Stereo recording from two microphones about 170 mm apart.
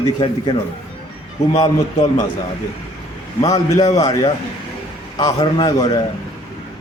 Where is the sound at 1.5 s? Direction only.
35° left (ahead or behind).